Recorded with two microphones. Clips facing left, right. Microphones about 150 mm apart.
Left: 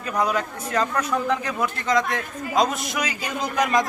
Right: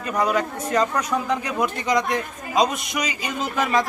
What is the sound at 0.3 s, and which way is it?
A man's voice, 10° right (ahead or behind).